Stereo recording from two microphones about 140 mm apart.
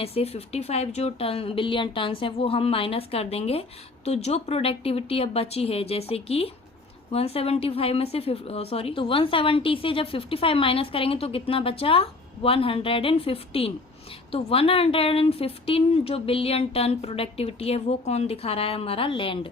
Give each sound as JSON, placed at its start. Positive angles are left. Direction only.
{"t": 0.0, "sound": "a woman's voice", "side_deg": 45}